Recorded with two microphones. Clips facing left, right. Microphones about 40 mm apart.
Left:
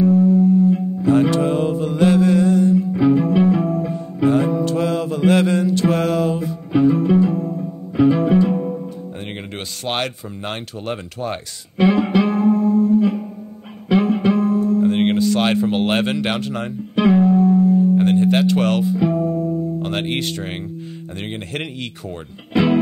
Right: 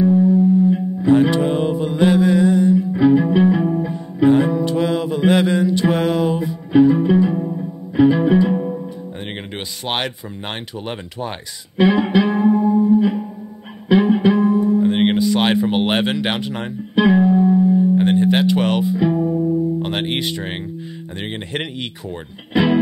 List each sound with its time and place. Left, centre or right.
0.1 s music: centre
7.9 s music: centre
10.9 s speech: centre
11.8 s music: centre
22.5 s speech: centre